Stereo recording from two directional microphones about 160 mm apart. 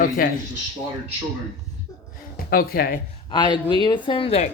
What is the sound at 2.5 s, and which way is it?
Speech, 70° left (ahead or behind).